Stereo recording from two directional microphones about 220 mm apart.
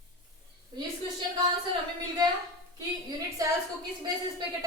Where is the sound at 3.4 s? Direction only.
15° right (ahead or behind).